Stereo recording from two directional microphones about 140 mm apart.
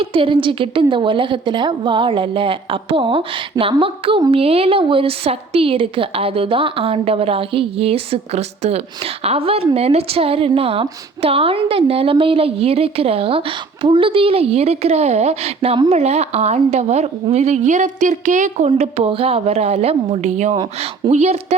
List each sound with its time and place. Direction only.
0.0 s a woman's voice: 40° right (ahead or behind)